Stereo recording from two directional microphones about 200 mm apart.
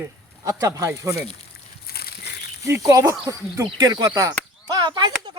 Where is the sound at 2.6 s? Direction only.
15° right (ahead or behind).